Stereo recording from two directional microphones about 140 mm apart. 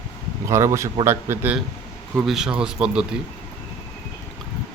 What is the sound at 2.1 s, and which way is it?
A man's voice, 5° right (ahead or behind).